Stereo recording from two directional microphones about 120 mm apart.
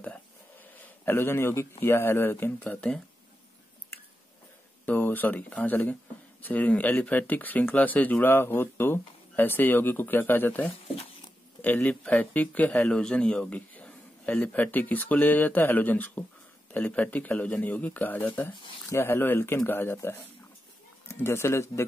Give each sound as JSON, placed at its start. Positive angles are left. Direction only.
{"t": 0.7, "sound": "speech", "side_deg": 15}
{"t": 4.8, "sound": "speech", "side_deg": 15}